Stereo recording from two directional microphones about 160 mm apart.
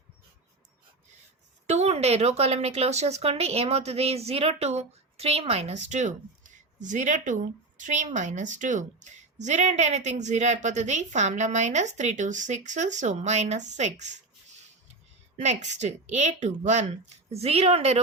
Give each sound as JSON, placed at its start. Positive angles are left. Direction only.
{"t": 1.6, "sound": "speech", "side_deg": -45}
{"t": 15.4, "sound": "a woman's voice", "side_deg": -45}